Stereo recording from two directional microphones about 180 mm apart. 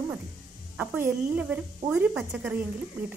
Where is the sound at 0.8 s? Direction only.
10° right (ahead or behind).